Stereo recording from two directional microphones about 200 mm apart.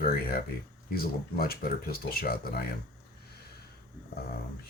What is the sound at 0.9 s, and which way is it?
Speech, 50° left (ahead or behind).